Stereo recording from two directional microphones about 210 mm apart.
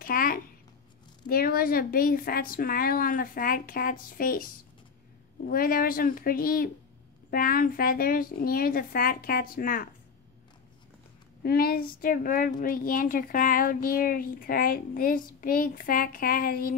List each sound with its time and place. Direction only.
0.0 s speech: 45° left (ahead or behind)
5.5 s speech: 45° left (ahead or behind)
11.4 s speech: 45° left (ahead or behind)